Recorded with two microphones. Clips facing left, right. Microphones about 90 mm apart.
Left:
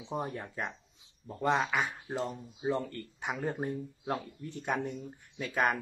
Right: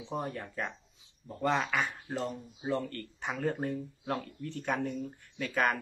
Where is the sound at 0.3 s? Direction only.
15° left (ahead or behind).